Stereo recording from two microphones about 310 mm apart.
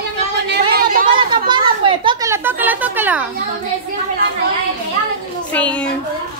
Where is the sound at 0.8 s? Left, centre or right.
Right.